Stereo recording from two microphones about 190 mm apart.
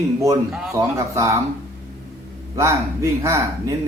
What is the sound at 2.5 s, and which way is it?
Speech, 15° right (ahead or behind).